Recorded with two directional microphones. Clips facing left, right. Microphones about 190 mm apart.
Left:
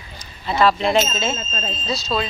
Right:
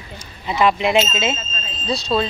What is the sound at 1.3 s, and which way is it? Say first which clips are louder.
Speech: left 5 dB; 50° left (ahead or behind).